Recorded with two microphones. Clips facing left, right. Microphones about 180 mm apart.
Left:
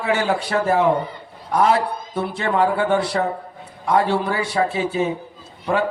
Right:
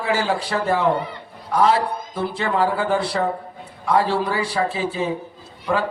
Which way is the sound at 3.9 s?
30° right (ahead or behind).